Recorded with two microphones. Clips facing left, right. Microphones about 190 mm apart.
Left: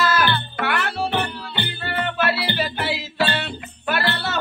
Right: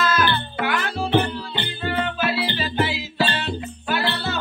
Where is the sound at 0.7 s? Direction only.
70° left (ahead or behind).